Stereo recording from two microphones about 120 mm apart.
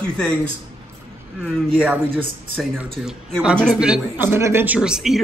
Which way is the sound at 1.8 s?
15° right (ahead or behind).